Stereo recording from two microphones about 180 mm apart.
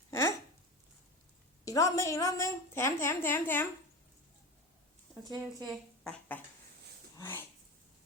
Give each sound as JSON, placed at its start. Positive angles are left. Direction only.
{"t": 1.6, "sound": "a woman's voice", "side_deg": 20}
{"t": 5.2, "sound": "a woman's voice", "side_deg": -20}
{"t": 5.6, "sound": "speech", "side_deg": 5}